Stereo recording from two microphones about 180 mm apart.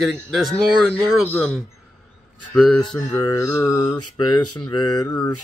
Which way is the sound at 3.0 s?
20° left (ahead or behind).